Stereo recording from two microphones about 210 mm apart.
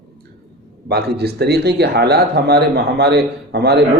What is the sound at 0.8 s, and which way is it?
Speech, 50° right (ahead or behind).